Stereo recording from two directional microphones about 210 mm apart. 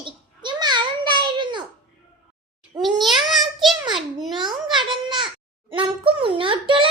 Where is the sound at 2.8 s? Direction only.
Centre (ahead or behind).